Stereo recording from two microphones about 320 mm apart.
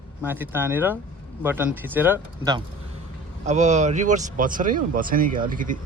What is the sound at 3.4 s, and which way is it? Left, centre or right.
Speech, right.